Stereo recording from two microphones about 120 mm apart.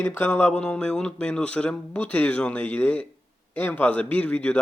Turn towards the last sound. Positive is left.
turn(degrees=10)  # may be behind; listen again after turning